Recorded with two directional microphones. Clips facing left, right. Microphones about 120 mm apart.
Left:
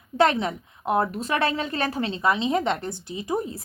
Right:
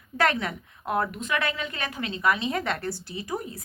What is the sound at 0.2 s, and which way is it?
A woman's voice, 25° left (ahead or behind).